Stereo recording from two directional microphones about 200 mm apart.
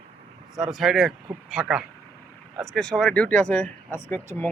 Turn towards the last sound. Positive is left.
turn(degrees=10)  # may be behind; listen again after turning